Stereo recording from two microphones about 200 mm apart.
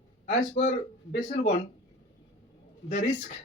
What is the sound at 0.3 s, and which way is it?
Speech, 35° left (ahead or behind).